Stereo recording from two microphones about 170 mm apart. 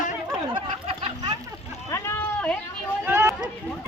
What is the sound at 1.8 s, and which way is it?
Cat, 20° left (ahead or behind).